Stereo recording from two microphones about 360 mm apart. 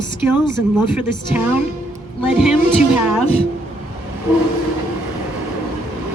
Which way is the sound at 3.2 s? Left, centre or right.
Centre.